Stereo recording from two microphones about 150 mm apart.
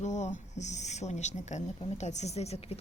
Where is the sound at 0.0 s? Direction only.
50° left (ahead or behind).